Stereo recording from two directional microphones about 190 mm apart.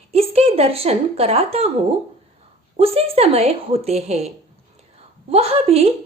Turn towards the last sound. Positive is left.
turn(degrees=-30)  # may be behind; listen again after turning